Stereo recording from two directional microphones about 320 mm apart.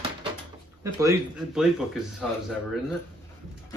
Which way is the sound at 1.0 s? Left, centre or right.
Centre.